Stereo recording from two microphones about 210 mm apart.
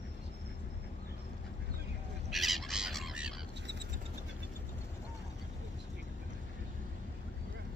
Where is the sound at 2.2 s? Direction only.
Centre (ahead or behind).